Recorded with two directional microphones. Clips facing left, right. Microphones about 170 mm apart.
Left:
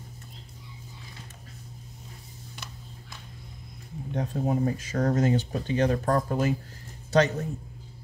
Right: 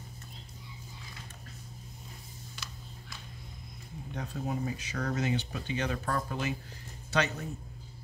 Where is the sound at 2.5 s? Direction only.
55° left (ahead or behind).